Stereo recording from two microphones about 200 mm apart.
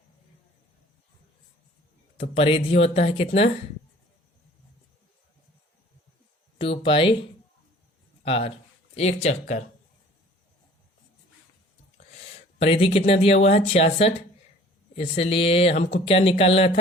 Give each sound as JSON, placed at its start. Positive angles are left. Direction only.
{"t": 2.1, "sound": "speech", "side_deg": 30}
{"t": 6.6, "sound": "a sound", "side_deg": 25}
{"t": 8.2, "sound": "speech", "side_deg": 30}
{"t": 12.1, "sound": "a sound", "side_deg": 35}
{"t": 13.1, "sound": "speech", "side_deg": 30}
{"t": 15.1, "sound": "speech", "side_deg": 30}